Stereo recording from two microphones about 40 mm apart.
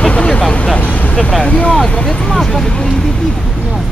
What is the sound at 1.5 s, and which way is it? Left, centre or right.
Speech, left.